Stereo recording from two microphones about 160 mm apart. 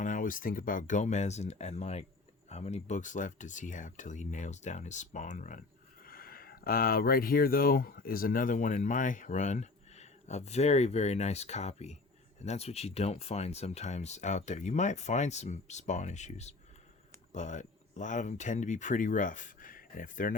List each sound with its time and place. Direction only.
0.0 s speech: 55° left (ahead or behind)
6.0 s speech: 65° left (ahead or behind)